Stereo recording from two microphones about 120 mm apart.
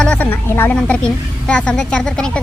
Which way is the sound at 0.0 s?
10° left (ahead or behind).